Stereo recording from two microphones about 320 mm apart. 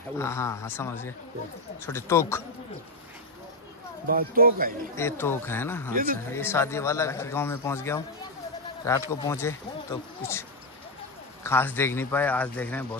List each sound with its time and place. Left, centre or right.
0.2 s a man's voice: centre
4.1 s speech: right
4.9 s a man's voice: centre
11.4 s a man's voice: centre